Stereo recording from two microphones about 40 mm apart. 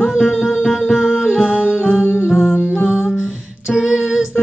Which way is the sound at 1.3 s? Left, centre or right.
Right.